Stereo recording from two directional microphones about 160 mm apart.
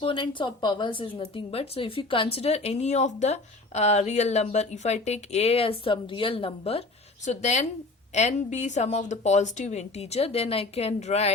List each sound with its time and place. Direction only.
0.0 s speech: 30° left (ahead or behind)
8.1 s a woman's voice: 45° left (ahead or behind)